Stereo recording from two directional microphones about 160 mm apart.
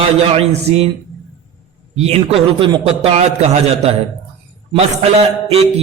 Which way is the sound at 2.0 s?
40° right (ahead or behind).